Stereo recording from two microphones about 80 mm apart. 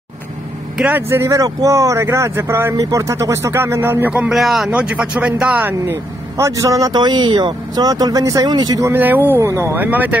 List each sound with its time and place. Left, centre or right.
0.8 s speech: right
1.3 s speech: right
2.8 s speech: right
4.3 s speech: centre
4.6 s speech: centre
6.3 s a man's voice: right
6.9 s speech: right
8.9 s speech: right
9.4 s speech: right
9.8 s speech: right